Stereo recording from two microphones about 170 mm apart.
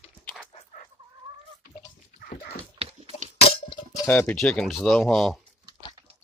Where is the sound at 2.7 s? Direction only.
35° right (ahead or behind).